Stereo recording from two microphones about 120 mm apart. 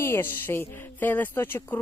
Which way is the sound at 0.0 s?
20° left (ahead or behind).